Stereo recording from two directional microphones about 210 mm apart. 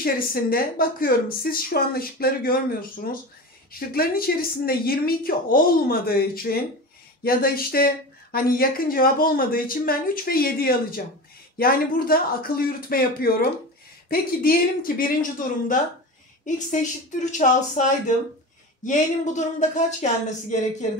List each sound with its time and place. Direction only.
0.0 s speech: 45° left (ahead or behind)
16.4 s speech: 35° left (ahead or behind)